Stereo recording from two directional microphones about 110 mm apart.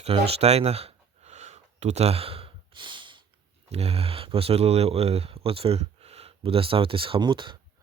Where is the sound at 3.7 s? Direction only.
70° right (ahead or behind); by 7.6 s 45° right (ahead or behind).